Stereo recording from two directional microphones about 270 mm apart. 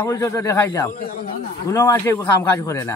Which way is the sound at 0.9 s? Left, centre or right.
Left.